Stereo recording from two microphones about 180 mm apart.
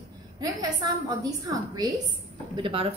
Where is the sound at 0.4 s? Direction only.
20° right (ahead or behind).